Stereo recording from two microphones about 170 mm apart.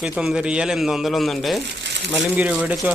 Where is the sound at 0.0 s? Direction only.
5° right (ahead or behind).